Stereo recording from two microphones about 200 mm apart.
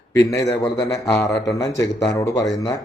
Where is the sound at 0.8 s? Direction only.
15° left (ahead or behind).